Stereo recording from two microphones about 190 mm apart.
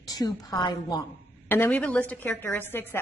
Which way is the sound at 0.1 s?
20° left (ahead or behind).